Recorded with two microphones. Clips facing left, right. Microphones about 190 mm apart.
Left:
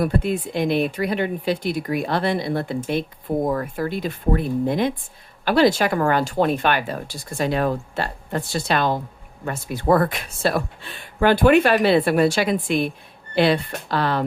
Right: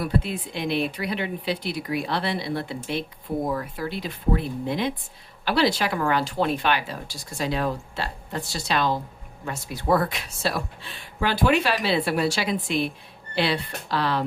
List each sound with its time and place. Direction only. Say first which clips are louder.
0.0 s speech: left 5 dB; 50° left (ahead or behind)